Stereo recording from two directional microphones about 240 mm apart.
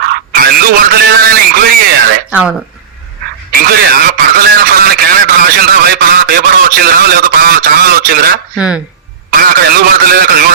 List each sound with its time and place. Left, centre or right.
0.3 s speech: right
2.3 s speech: centre
3.5 s speech: right
8.5 s speech: centre
9.3 s speech: right